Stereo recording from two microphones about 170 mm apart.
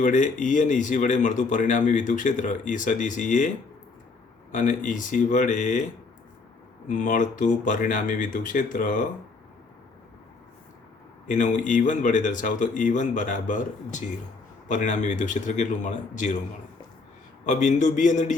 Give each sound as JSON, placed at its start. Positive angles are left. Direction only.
{"t": 0.0, "sound": "speech", "side_deg": 50}
{"t": 4.5, "sound": "speech", "side_deg": 50}
{"t": 6.8, "sound": "speech", "side_deg": 50}
{"t": 11.3, "sound": "speech", "side_deg": 50}
{"t": 17.4, "sound": "speech", "side_deg": 45}